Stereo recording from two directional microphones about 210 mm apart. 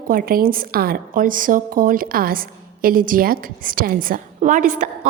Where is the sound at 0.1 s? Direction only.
45° right (ahead or behind).